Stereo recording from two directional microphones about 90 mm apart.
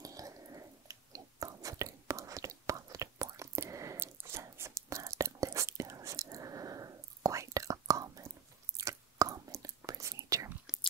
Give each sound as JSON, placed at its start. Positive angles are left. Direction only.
{"t": 0.0, "sound": "chewing", "side_deg": -40}
{"t": 8.7, "sound": "a sound", "side_deg": -40}
{"t": 9.8, "sound": "whispering", "side_deg": -35}